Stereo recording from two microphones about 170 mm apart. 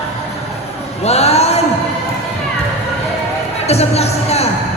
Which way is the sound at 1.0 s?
40° left (ahead or behind).